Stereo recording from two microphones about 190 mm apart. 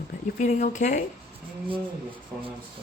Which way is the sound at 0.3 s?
40° left (ahead or behind).